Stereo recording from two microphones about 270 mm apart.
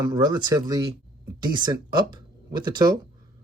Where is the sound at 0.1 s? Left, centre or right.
Centre.